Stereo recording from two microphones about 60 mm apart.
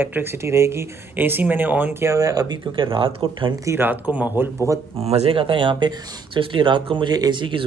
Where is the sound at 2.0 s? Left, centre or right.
Right.